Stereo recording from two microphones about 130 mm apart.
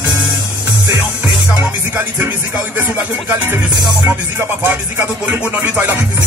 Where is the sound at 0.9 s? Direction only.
15° right (ahead or behind).